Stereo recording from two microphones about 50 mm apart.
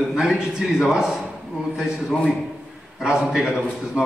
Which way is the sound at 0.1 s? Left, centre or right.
Centre.